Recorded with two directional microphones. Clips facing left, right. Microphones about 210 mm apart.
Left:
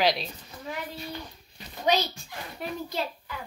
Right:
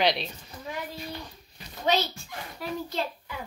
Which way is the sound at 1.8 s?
15° left (ahead or behind).